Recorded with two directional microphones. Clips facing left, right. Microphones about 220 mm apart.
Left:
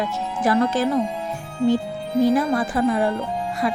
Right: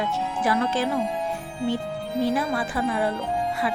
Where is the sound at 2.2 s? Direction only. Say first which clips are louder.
Left 6 dB; 45° left (ahead or behind).